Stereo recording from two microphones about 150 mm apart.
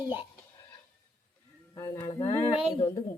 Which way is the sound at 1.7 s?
20° left (ahead or behind).